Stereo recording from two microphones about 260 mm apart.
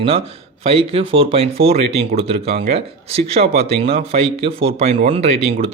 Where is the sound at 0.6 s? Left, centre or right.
Right.